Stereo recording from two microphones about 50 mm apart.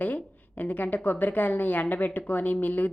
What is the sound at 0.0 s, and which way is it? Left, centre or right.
A woman's voice, left.